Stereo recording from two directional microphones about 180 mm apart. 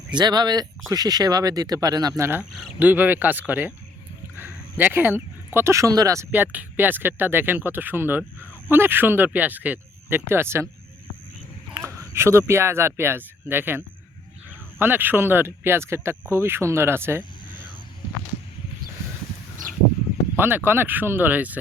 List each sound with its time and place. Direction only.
0.1 s speech: 25° right (ahead or behind)
11.7 s speech: 15° right (ahead or behind)
20.3 s a sound: 10° right (ahead or behind)
20.7 s speech: 10° right (ahead or behind)